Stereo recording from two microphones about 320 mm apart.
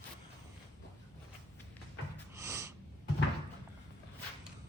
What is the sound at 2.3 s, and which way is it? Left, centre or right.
Snort, centre.